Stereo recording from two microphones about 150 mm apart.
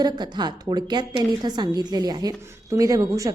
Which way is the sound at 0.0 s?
30° right (ahead or behind).